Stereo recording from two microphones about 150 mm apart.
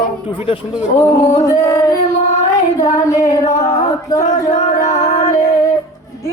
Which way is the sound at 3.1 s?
20° left (ahead or behind).